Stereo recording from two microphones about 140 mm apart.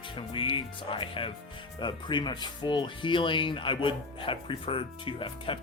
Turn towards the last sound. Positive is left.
turn(degrees=40)  # may be behind; listen again after turning